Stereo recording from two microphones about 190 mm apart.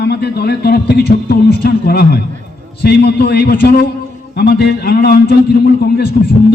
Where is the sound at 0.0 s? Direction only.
60° left (ahead or behind).